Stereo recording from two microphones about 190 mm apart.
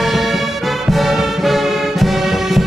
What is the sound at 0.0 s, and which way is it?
Music, centre (ahead or behind).